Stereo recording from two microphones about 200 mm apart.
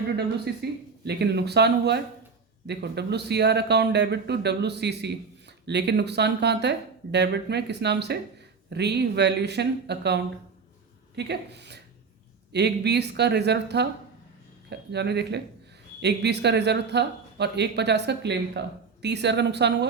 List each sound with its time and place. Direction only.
0.2 s speech: 55° right (ahead or behind)